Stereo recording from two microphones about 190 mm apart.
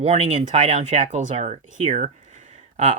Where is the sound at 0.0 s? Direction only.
35° right (ahead or behind).